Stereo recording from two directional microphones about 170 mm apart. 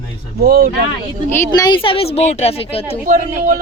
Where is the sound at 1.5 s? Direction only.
25° left (ahead or behind).